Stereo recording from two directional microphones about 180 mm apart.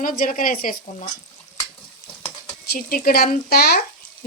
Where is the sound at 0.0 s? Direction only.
50° left (ahead or behind).